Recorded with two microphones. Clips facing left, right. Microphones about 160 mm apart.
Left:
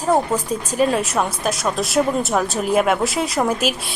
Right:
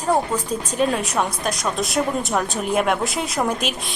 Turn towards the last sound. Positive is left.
turn(degrees=5)  # may be behind; listen again after turning